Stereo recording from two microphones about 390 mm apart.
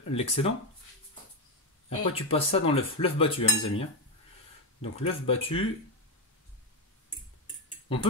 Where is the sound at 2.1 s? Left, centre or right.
Centre.